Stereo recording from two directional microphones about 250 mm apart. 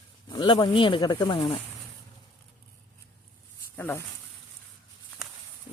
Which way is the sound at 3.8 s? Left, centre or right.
Centre.